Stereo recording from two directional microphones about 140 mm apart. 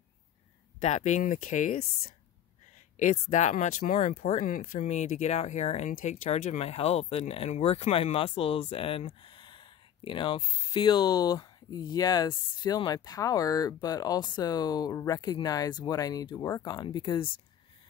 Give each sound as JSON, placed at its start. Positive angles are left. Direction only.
{"t": 0.7, "sound": "speech", "side_deg": 55}